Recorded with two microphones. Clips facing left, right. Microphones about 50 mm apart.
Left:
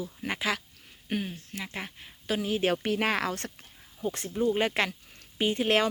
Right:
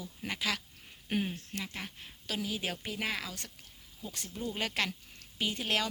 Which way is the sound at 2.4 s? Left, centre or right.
Left.